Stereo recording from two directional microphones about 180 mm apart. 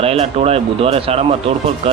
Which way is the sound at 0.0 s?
35° right (ahead or behind).